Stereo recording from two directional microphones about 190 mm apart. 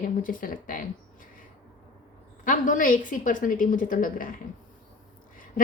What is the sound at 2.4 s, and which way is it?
A woman's voice, 45° left (ahead or behind).